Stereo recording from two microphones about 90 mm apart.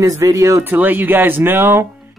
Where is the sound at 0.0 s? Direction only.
40° right (ahead or behind).